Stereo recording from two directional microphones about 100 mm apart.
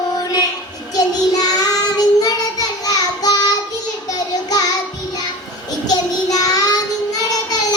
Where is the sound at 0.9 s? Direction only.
40° left (ahead or behind).